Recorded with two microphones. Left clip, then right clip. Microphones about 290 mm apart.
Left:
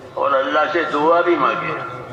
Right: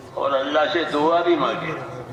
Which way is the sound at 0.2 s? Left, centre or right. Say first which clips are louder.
Left 3 dB; right.